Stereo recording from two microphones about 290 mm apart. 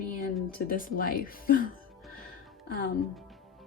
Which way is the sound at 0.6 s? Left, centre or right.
Left.